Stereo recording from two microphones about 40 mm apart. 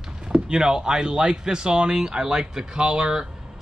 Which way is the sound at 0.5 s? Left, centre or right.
Centre.